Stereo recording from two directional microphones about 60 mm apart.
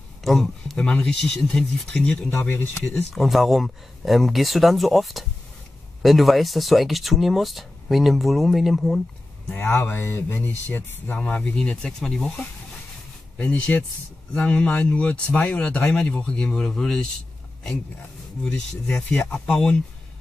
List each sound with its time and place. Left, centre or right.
0.2 s speech: centre
0.7 s speech: centre
2.3 s speech: left
3.0 s speech: centre
9.5 s speech: left
11.1 s speech: left
13.4 s speech: left
18.4 s speech: centre